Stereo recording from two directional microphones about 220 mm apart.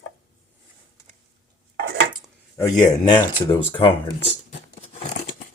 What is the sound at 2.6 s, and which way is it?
Speech, 15° left (ahead or behind).